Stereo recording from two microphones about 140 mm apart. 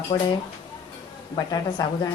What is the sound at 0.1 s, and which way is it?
Speech, 30° left (ahead or behind).